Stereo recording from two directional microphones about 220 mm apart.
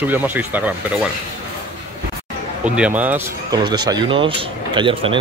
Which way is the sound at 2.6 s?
5° right (ahead or behind).